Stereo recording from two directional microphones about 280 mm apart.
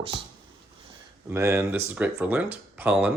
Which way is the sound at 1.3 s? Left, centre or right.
Centre.